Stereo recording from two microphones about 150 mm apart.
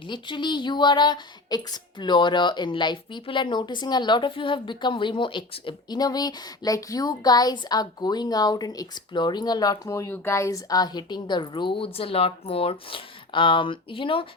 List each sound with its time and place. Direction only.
0.1 s speech: 30° left (ahead or behind)